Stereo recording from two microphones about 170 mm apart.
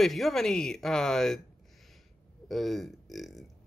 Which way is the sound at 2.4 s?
Centre (ahead or behind).